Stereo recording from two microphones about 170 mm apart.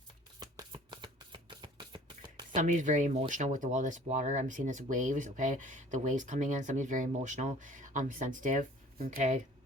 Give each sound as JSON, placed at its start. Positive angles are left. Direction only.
{"t": 0.3, "sound": "shuffling cards", "side_deg": -25}
{"t": 2.6, "sound": "speech", "side_deg": -45}